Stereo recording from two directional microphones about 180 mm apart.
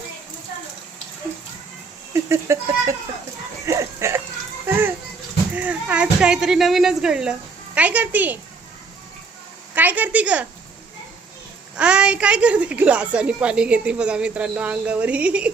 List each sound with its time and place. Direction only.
2.1 s a woman's voice: 15° right (ahead or behind)
5.5 s a woman's voice: 5° right (ahead or behind)
9.7 s a woman's voice: 10° right (ahead or behind)
11.8 s a woman's voice: 5° right (ahead or behind)